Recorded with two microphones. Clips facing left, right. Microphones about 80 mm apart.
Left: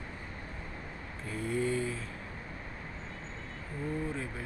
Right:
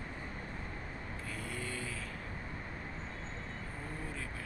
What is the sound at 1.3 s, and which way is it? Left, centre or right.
Speech, left.